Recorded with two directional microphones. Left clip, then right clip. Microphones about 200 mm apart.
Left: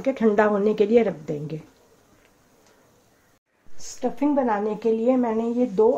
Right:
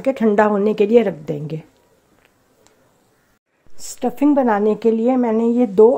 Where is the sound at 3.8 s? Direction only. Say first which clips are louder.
Right 6 dB; 45° right (ahead or behind).